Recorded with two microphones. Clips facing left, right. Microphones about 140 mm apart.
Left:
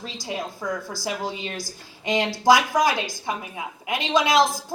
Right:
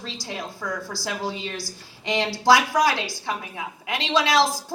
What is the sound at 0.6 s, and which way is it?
A woman's voice, 20° left (ahead or behind).